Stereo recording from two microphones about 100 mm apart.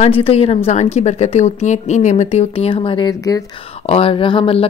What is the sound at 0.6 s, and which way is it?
Speech, 90° left.